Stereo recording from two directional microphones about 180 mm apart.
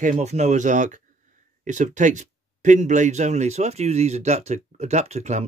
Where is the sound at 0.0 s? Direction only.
40° right (ahead or behind).